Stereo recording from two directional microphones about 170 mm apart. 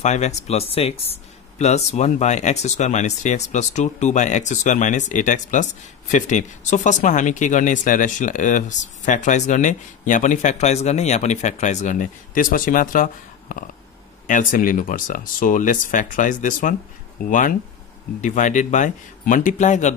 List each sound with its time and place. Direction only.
0.0 s speech: 45° left (ahead or behind)